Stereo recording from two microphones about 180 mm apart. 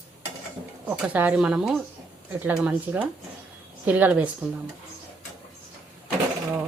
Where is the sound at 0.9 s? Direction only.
5° right (ahead or behind).